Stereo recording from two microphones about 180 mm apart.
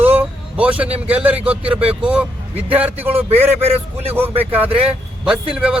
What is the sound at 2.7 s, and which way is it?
Speech, 10° right (ahead or behind).